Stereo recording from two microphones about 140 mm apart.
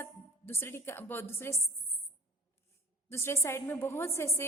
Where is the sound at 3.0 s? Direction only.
20° left (ahead or behind).